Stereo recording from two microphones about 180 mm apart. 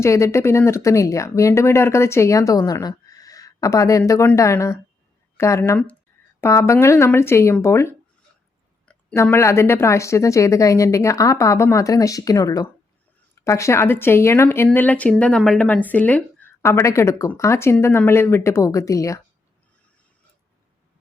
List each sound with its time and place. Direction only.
0.0 s a woman's voice: 15° left (ahead or behind)
9.1 s a woman's voice: 15° left (ahead or behind)